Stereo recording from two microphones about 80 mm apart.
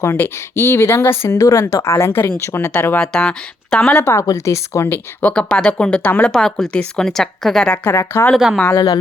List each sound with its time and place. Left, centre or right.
0.0 s speech: left
3.0 s speech: centre
4.0 s speech: left
5.3 s speech: centre
7.9 s speech: left
8.7 s a woman's voice: left